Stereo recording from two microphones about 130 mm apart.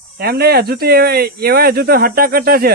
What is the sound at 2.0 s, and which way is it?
Speech, 90° right.